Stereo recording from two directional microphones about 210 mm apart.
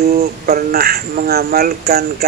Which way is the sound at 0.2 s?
45° right (ahead or behind).